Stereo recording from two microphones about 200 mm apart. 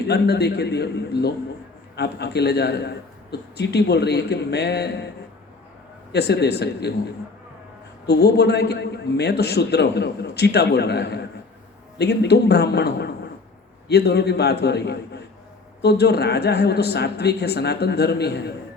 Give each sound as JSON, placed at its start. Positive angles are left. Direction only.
{"t": 0.0, "sound": "a man's voice", "side_deg": 55}
{"t": 8.0, "sound": "a man's voice", "side_deg": 55}